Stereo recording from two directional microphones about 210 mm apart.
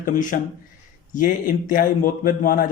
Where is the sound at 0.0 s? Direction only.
40° left (ahead or behind).